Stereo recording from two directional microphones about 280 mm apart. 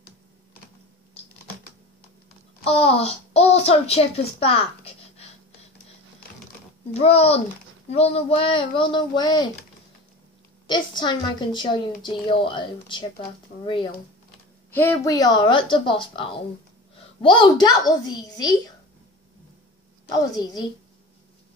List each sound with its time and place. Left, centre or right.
2.6 s a child's voice: left
6.9 s a child's voice: left
10.7 s a woman's voice: centre
14.7 s a woman's voice: centre
20.1 s a woman's voice: centre